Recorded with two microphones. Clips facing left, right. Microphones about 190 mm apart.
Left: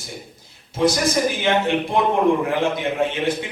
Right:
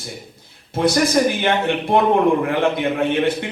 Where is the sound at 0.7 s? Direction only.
60° right (ahead or behind).